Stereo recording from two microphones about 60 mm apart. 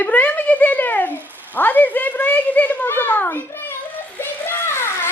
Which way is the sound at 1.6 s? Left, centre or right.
Left.